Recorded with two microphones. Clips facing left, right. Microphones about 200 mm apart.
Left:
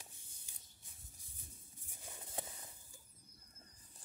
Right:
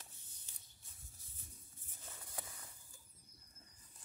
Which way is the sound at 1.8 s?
15° left (ahead or behind).